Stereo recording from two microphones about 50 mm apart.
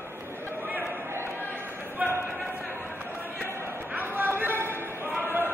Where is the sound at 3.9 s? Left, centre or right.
Right.